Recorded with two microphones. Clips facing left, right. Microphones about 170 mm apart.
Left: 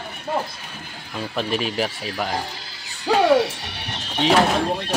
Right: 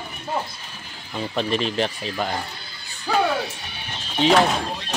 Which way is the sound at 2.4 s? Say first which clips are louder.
Left 2 dB; 90° left.